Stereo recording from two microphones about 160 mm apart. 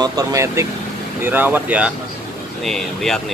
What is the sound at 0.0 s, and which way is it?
Speech, 20° right (ahead or behind).